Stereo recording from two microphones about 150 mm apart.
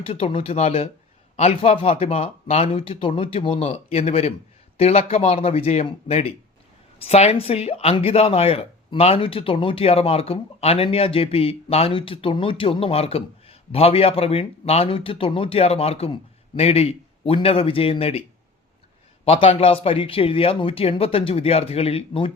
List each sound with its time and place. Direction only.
0.0 s speech: 40° left (ahead or behind)
19.2 s speech: 40° left (ahead or behind)